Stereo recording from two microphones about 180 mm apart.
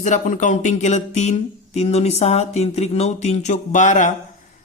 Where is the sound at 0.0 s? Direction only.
45° left (ahead or behind).